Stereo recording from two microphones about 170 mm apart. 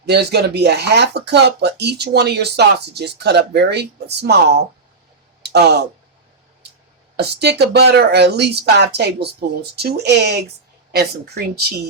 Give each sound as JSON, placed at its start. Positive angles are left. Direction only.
{"t": 0.0, "sound": "speech", "side_deg": -75}
{"t": 5.4, "sound": "a sound", "side_deg": -75}
{"t": 7.2, "sound": "speech", "side_deg": -75}